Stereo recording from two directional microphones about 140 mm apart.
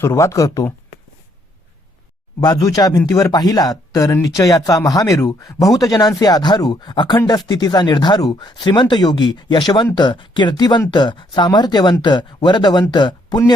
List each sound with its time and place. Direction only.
0.0 s speech: 20° left (ahead or behind)
2.4 s speech: 25° left (ahead or behind)